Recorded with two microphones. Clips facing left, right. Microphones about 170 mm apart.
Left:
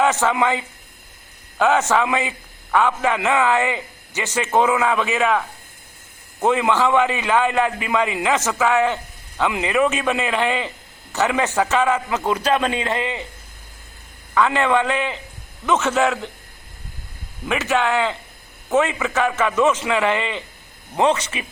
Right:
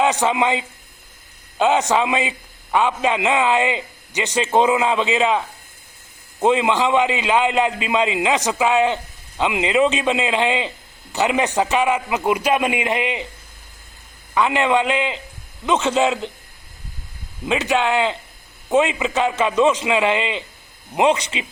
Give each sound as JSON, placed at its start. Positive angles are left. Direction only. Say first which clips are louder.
{"t": 0.0, "sound": "a man's voice", "louder": "even", "side_deg": -20}
{"t": 6.4, "sound": "a man's voice", "louder": "right 1 dB", "side_deg": -20}
{"t": 14.3, "sound": "a man's voice", "louder": "even", "side_deg": -15}
{"t": 17.4, "sound": "a man's voice", "louder": "right 1 dB", "side_deg": -20}